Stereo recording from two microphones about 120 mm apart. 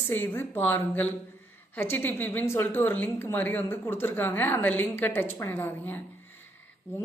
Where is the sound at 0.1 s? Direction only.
20° left (ahead or behind).